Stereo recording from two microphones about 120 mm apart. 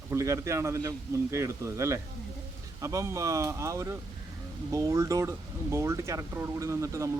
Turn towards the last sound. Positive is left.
turn(degrees=-25)  # may be behind; listen again after turning